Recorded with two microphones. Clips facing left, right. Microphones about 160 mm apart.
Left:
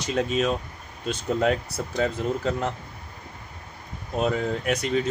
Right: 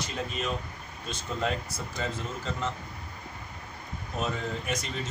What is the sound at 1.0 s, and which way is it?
Speech, 65° left (ahead or behind).